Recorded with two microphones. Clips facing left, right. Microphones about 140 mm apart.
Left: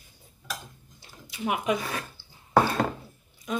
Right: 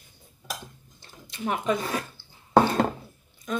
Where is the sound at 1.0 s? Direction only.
10° left (ahead or behind).